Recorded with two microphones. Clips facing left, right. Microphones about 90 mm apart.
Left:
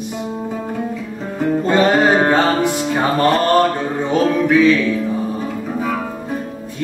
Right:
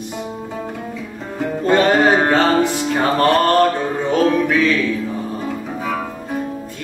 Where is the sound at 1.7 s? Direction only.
15° left (ahead or behind).